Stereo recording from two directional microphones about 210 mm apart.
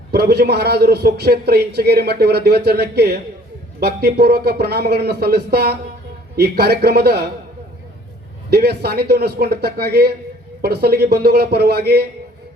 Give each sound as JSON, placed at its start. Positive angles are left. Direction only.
{"t": 0.1, "sound": "a man's voice", "side_deg": -50}
{"t": 8.4, "sound": "a man's voice", "side_deg": -50}